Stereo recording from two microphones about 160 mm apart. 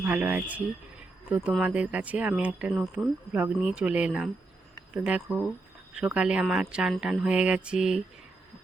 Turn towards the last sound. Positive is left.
turn(degrees=-5)  # may be behind; listen again after turning